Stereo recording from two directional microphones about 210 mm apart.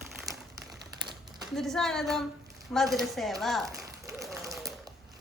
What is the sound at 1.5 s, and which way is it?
Speech, centre (ahead or behind).